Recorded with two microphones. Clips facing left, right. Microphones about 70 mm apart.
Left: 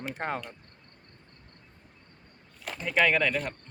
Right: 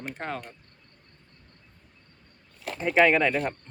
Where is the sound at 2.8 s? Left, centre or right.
Right.